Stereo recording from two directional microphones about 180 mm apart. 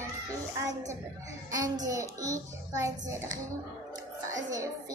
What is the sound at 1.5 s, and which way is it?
A child's voice, 20° right (ahead or behind).